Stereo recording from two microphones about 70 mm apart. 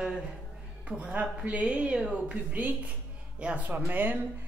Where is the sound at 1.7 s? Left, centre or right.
Centre.